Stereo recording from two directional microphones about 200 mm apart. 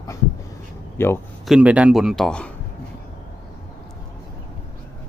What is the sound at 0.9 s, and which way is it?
Speech, 10° left (ahead or behind).